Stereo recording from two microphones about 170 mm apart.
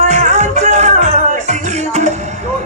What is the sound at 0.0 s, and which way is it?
Music, 45° right (ahead or behind).